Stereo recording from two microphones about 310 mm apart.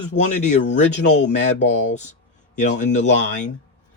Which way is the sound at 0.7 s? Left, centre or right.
Left.